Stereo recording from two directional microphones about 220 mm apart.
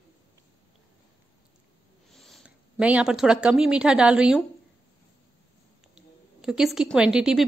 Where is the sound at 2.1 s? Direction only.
Centre (ahead or behind).